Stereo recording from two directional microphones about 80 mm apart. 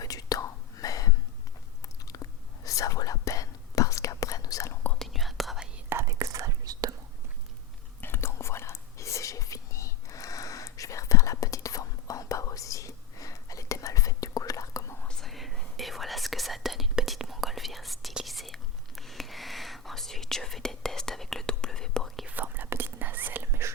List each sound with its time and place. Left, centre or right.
0.0 s whispering: left
2.1 s chewing: left
2.6 s whispering: left
4.9 s whispering: centre
6.1 s whispering: right
8.0 s whispering: left
15.0 s whispering: centre
22.3 s whispering: right